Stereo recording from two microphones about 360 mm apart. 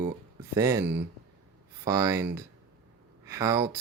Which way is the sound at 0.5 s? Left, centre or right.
Centre.